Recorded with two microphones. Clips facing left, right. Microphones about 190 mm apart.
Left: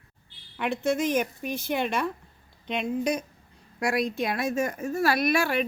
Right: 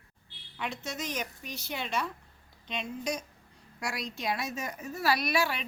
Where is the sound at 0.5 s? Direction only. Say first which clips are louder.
Left 11 dB; 55° left (ahead or behind).